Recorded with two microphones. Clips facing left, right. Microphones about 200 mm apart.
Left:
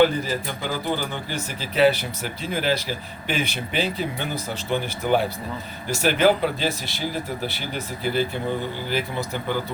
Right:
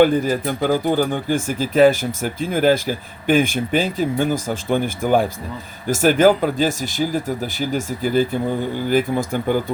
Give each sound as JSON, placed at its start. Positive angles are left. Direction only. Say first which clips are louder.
{"t": 0.0, "sound": "speech", "louder": "right 5 dB", "side_deg": -50}